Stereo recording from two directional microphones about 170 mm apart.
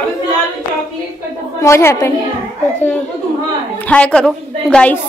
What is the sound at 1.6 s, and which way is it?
Speech, 15° left (ahead or behind).